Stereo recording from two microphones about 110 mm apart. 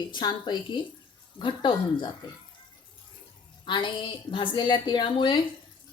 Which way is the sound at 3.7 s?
45° left (ahead or behind).